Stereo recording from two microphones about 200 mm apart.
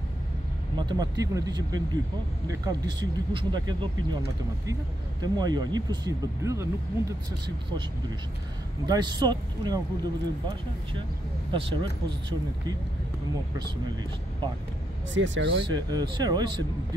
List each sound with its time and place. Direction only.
0.7 s speech: 20° right (ahead or behind)
5.2 s speech: 20° right (ahead or behind)
8.8 s speech: 20° right (ahead or behind)
11.5 s speech: 25° right (ahead or behind)
15.1 s speech: 70° right (ahead or behind)
15.6 s speech: 20° right (ahead or behind)